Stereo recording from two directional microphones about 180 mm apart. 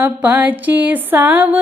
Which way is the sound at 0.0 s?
10° right (ahead or behind).